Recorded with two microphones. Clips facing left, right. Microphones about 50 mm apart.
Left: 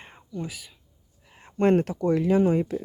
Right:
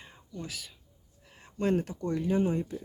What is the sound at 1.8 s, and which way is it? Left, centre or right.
Speech, left.